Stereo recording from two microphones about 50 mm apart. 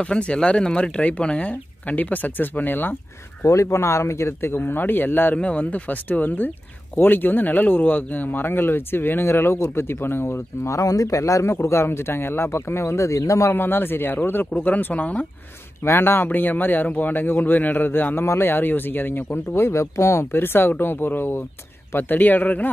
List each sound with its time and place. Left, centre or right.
0.0 s speech: left
3.4 s speech: left
4.6 s speech: left
5.3 s speech: left
11.5 s speech: left
12.4 s speech: left
13.5 s speech: left
15.8 s speech: left
19.3 s speech: left